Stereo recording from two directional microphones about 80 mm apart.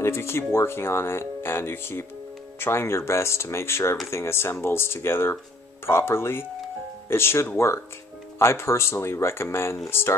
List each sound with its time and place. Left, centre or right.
0.0 s speech: left